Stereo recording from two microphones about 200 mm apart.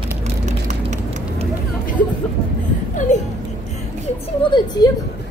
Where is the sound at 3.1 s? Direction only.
35° left (ahead or behind).